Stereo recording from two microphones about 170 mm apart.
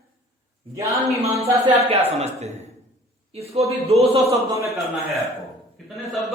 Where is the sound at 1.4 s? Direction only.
35° right (ahead or behind).